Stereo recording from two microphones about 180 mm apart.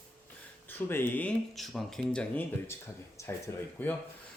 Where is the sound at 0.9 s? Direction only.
10° left (ahead or behind).